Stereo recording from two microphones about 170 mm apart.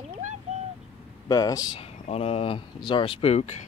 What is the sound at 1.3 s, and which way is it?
Speech, 20° left (ahead or behind).